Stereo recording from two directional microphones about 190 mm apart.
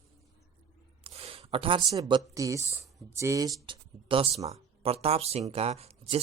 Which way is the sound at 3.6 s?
25° right (ahead or behind).